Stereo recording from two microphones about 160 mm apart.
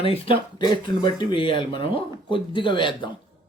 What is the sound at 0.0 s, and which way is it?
Speech, 35° left (ahead or behind).